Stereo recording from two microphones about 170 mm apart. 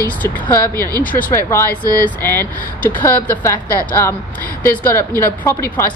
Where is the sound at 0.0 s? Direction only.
10° left (ahead or behind).